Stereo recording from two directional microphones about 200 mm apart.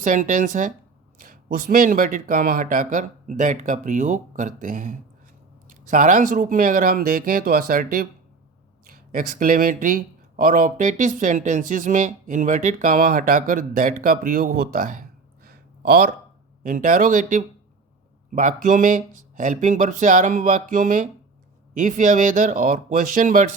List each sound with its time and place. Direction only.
0.0 s speech: 40° right (ahead or behind)
9.1 s speech: 45° right (ahead or behind)
15.4 s a sound: 50° right (ahead or behind)
16.6 s speech: 40° right (ahead or behind)